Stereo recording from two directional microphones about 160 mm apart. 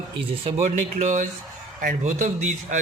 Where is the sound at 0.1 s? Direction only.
40° right (ahead or behind).